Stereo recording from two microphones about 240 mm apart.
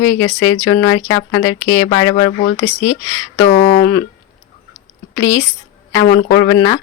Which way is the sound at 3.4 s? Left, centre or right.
Left.